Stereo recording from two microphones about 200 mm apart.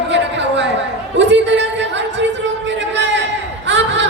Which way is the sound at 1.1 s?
65° right (ahead or behind).